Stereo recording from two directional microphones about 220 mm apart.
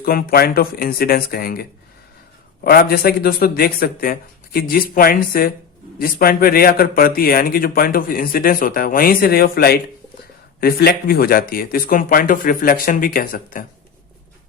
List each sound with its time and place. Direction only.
0.0 s speech: 40° left (ahead or behind)
2.6 s speech: 45° left (ahead or behind)